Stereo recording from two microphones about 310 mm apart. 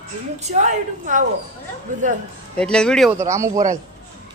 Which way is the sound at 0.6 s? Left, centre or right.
Right.